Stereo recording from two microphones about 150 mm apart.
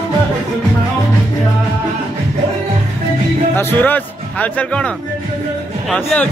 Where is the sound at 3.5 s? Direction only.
15° left (ahead or behind).